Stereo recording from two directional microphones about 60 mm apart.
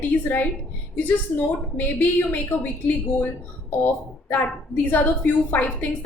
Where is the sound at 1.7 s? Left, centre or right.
Left.